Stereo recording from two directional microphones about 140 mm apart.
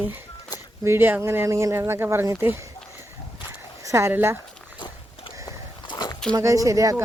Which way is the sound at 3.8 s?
20° right (ahead or behind).